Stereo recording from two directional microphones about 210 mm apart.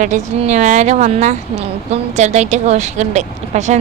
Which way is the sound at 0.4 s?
35° right (ahead or behind).